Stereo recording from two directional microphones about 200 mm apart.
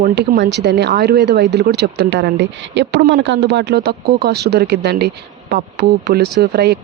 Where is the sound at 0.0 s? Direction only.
50° right (ahead or behind).